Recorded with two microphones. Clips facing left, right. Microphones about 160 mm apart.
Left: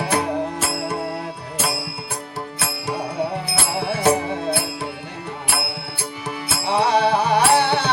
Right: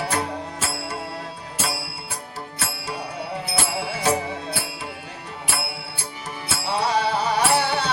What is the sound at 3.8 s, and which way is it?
Music, 60° left (ahead or behind).